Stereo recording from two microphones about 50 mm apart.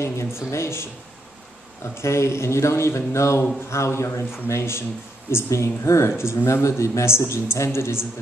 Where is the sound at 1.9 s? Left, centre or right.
Left.